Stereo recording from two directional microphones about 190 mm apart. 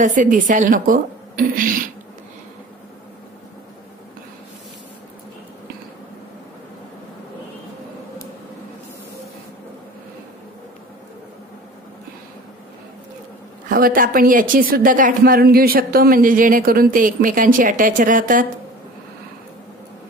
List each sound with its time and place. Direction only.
0.0 s a woman's voice: 45° right (ahead or behind)
13.7 s speech: 50° right (ahead or behind)